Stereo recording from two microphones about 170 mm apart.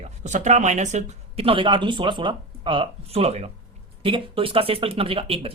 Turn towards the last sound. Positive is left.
turn(degrees=-35)  # may be behind; listen again after turning